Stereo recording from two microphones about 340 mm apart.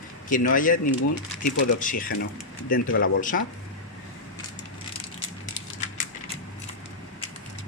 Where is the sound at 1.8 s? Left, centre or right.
Left.